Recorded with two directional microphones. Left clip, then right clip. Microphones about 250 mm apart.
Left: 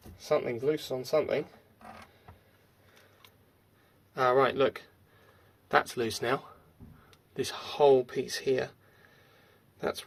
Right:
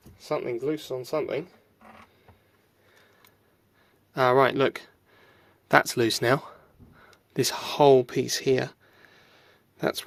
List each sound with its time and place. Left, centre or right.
0.2 s speech: right
4.1 s speech: right
7.3 s a sound: right